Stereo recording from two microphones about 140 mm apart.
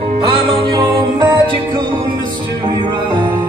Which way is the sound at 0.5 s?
35° right (ahead or behind).